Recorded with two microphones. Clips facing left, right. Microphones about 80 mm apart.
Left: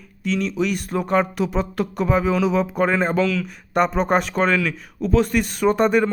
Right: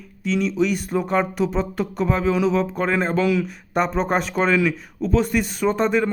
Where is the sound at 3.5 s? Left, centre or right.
Centre.